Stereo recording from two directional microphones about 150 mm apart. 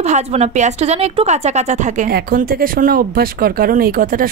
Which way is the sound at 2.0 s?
80° right.